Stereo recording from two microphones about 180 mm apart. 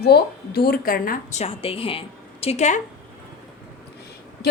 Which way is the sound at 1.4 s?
30° left (ahead or behind).